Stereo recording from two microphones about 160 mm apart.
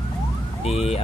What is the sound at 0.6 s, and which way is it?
Speech, 40° left (ahead or behind).